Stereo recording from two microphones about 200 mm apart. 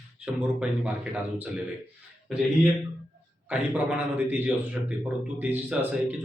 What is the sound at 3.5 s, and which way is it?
A man's voice, 10° right (ahead or behind).